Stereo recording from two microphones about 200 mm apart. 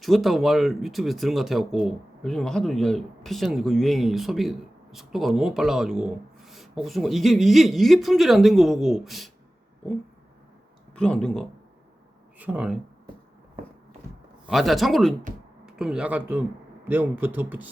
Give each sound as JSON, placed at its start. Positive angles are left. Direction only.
{"t": 0.0, "sound": "speech", "side_deg": 0}
{"t": 10.9, "sound": "speech", "side_deg": 5}
{"t": 14.4, "sound": "speech", "side_deg": 0}